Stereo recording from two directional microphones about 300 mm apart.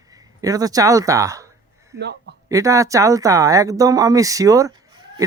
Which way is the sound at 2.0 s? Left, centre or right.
Right.